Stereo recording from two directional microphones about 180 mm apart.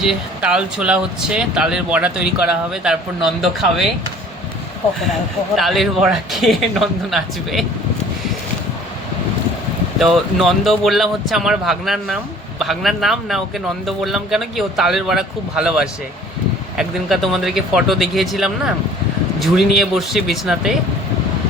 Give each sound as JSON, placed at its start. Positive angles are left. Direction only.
{"t": 0.0, "sound": "speech", "side_deg": -5}
{"t": 5.5, "sound": "speech", "side_deg": 0}
{"t": 10.0, "sound": "speech", "side_deg": 0}